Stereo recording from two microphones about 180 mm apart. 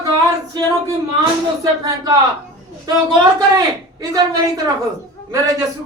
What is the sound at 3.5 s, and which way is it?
A woman's voice, 20° right (ahead or behind).